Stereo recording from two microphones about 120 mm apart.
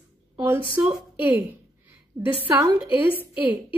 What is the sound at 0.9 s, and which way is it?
A woman's voice, 15° right (ahead or behind).